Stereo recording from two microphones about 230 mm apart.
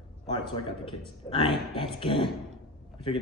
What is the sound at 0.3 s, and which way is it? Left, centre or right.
A man's voice, left.